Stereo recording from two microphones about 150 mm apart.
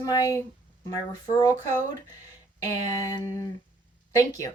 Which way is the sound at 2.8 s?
20° left (ahead or behind).